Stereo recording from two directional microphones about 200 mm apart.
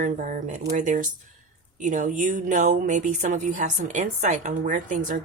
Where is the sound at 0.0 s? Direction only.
40° right (ahead or behind).